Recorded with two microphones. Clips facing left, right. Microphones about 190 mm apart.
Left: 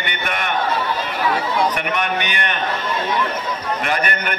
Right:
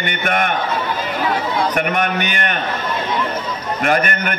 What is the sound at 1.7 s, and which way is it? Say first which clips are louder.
Speech: right 3 dB; 50° right (ahead or behind).